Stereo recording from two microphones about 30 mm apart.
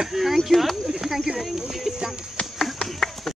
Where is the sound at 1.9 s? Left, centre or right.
Centre.